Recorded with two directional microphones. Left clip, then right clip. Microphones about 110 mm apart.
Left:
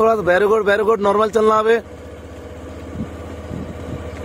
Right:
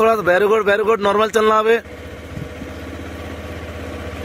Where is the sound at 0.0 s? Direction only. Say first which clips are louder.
Even; 10° left (ahead or behind).